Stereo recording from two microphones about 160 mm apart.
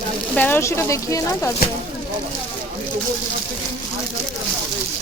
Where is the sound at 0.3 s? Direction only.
10° left (ahead or behind).